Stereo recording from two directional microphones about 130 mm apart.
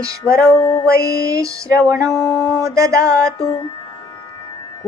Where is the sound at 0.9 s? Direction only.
25° right (ahead or behind).